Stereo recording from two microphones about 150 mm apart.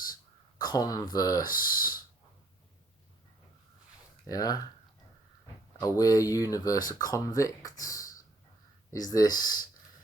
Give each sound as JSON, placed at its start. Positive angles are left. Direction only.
{"t": 0.6, "sound": "speech", "side_deg": 25}
{"t": 1.6, "sound": "a sound", "side_deg": 25}
{"t": 4.3, "sound": "speech", "side_deg": 25}
{"t": 5.8, "sound": "speech", "side_deg": 25}
{"t": 9.1, "sound": "speech", "side_deg": 25}